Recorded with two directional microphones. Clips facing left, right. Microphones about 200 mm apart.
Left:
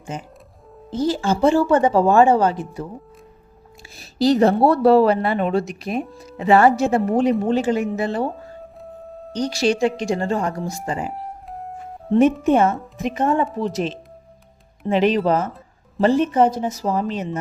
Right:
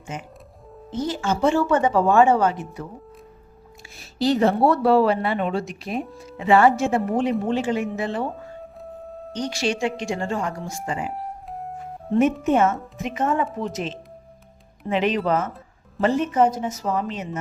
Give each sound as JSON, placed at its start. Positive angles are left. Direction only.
{"t": 0.1, "sound": "speech", "side_deg": 35}
{"t": 3.8, "sound": "speech", "side_deg": 40}
{"t": 9.3, "sound": "speech", "side_deg": 35}
{"t": 11.1, "sound": "music", "side_deg": 0}
{"t": 12.5, "sound": "speech", "side_deg": 35}
{"t": 14.8, "sound": "speech", "side_deg": 35}